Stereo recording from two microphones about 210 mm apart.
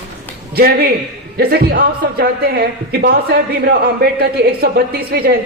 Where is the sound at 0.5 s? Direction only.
50° right (ahead or behind).